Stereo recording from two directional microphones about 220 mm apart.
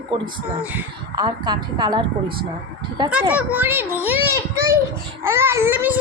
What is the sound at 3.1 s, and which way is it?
A child's voice, 5° right (ahead or behind).